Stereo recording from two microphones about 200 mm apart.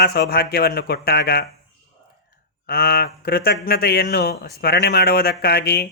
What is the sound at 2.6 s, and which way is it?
Speech, 50° left (ahead or behind).